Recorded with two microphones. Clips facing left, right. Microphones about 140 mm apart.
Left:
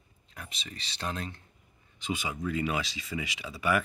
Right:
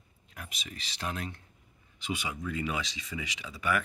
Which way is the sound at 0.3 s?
10° right (ahead or behind).